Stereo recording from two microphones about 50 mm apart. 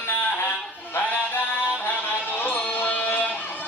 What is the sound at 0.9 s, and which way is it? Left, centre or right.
Music, left.